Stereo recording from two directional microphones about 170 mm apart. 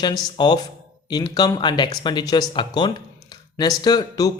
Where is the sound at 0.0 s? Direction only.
25° left (ahead or behind).